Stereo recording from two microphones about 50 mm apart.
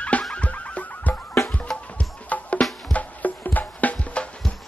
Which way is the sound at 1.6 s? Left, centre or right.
Centre.